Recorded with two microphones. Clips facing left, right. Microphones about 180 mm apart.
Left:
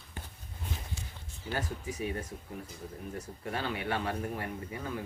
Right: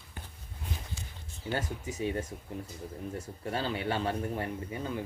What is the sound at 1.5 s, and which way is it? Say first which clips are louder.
Speech: right 1 dB; 25° right (ahead or behind).